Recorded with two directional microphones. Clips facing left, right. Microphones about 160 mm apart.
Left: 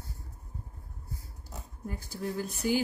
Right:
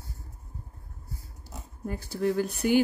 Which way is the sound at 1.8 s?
70° right (ahead or behind).